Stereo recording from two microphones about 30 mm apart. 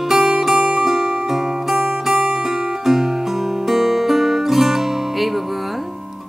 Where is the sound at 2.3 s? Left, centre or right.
Centre.